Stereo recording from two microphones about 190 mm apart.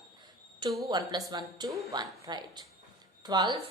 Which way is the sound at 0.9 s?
20° right (ahead or behind).